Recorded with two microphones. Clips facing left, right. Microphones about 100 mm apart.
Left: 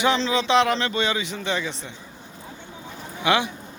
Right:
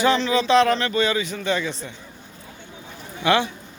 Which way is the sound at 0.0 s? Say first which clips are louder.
Right 2 dB; 20° left (ahead or behind).